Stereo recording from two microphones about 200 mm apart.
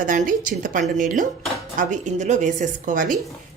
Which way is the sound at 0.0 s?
40° right (ahead or behind).